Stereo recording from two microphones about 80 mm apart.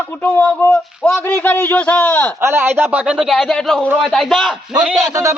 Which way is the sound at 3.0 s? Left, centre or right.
Centre.